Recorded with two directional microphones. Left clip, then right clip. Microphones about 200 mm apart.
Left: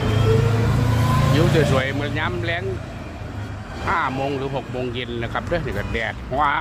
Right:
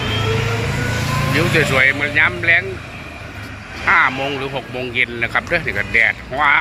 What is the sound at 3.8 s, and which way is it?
Speech, centre (ahead or behind).